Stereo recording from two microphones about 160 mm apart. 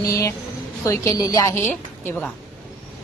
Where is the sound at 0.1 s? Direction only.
20° left (ahead or behind).